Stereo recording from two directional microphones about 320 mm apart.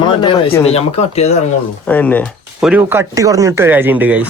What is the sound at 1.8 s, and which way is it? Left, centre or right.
Speech, centre.